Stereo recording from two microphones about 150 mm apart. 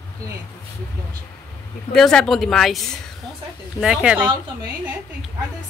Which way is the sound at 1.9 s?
5° left (ahead or behind).